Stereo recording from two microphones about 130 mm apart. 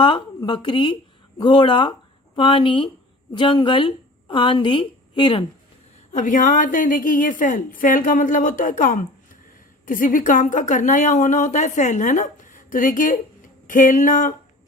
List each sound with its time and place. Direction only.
0.0 s a woman's voice: 35° left (ahead or behind)
6.1 s a woman's voice: 80° left